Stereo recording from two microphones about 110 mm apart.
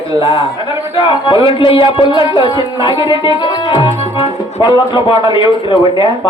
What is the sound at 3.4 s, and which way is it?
Music, 50° left (ahead or behind).